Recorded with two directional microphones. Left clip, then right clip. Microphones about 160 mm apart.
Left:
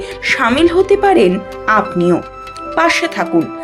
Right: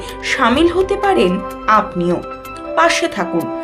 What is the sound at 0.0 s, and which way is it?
A woman's voice, 20° left (ahead or behind).